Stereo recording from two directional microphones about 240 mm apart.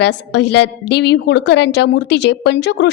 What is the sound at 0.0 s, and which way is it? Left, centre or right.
A woman's voice, left.